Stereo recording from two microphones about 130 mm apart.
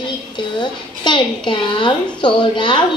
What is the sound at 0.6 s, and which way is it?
A child's voice, 35° left (ahead or behind).